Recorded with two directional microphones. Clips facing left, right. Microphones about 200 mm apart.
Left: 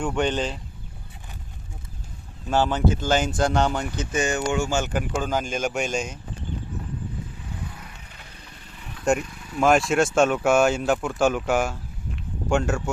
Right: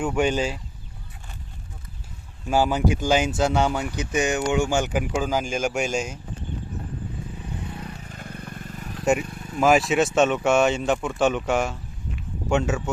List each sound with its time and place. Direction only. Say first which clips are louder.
0.0 s speech: right 2 dB; 5° right (ahead or behind)
2.5 s speech: right 1 dB; 10° right (ahead or behind)
7.7 s vehicle: right 8 dB; 30° right (ahead or behind)
8.0 s vehicle: right 10 dB; 45° right (ahead or behind)
9.6 s speech: even; centre (ahead or behind)